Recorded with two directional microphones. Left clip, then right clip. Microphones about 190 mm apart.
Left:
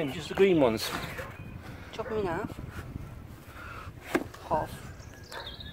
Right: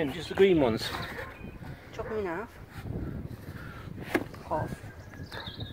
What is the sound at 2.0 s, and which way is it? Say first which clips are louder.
Speech: left 2 dB; 10° left (ahead or behind).